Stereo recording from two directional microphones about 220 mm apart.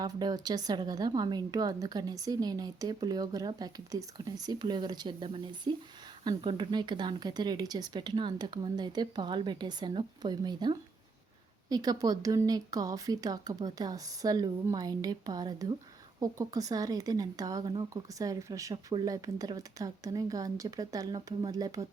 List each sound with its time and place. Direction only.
0.0 s a woman's voice: 20° right (ahead or behind)